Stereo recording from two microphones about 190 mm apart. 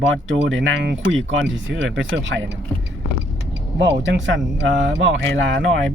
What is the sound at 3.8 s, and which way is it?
Speech, 70° right (ahead or behind).